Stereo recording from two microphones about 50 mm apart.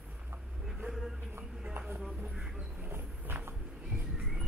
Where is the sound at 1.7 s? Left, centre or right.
Right.